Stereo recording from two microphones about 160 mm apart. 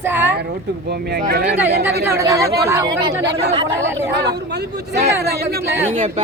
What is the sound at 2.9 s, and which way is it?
Speech, 90° right.